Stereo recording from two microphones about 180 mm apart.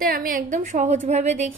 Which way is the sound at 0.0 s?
55° right (ahead or behind).